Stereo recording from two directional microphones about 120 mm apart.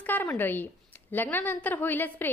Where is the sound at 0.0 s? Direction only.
15° left (ahead or behind).